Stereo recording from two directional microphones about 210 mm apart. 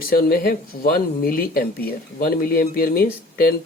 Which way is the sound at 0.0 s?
45° left (ahead or behind).